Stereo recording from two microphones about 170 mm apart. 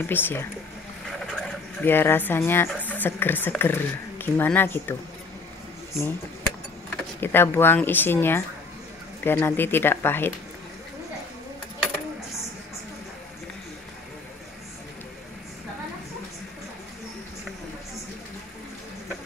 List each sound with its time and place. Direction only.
0.0 s speech: 10° left (ahead or behind)
5.9 s speech: 15° left (ahead or behind)